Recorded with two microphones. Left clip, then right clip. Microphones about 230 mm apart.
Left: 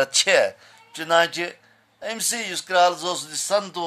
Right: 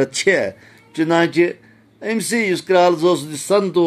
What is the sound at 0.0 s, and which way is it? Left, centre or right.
Speech, centre.